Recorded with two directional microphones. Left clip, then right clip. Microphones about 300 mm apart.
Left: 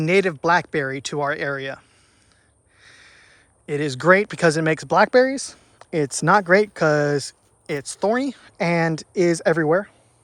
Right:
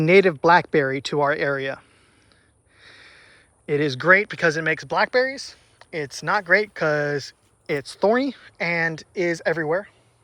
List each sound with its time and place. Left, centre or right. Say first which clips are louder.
0.0 s speech: right 3 dB; centre
3.7 s speech: even; centre